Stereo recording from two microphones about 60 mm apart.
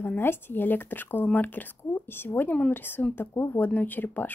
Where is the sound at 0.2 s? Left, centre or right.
Left.